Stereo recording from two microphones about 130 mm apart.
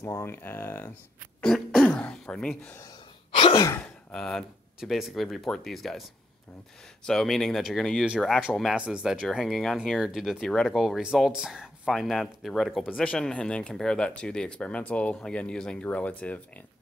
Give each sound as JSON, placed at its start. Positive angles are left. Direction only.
{"t": 0.0, "sound": "speech", "side_deg": 20}
{"t": 1.4, "sound": "throat clearing", "side_deg": 0}
{"t": 3.3, "sound": "sigh", "side_deg": 40}
{"t": 4.1, "sound": "speech", "side_deg": 5}
{"t": 7.1, "sound": "speech", "side_deg": 0}